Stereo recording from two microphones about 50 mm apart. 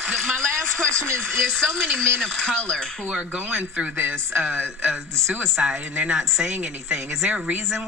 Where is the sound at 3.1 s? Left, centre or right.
Right.